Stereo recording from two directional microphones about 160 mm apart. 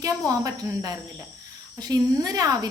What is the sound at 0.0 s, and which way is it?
Speech, 20° right (ahead or behind).